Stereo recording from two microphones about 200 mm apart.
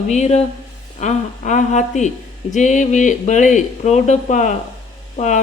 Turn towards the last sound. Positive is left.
turn(degrees=35)  # may be behind; listen again after turning